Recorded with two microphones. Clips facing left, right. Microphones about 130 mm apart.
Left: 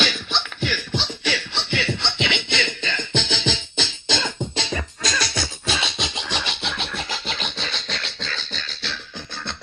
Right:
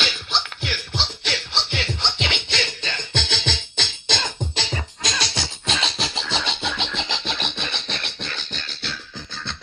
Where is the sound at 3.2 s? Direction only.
15° left (ahead or behind).